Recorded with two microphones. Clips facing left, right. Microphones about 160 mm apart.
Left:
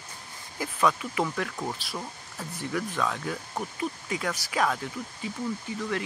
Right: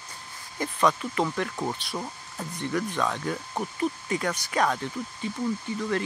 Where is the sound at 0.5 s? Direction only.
5° left (ahead or behind).